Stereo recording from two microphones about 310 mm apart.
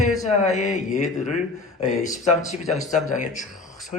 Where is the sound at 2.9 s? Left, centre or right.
Left.